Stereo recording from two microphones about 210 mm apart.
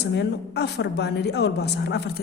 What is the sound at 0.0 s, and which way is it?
A woman's voice, 55° left (ahead or behind).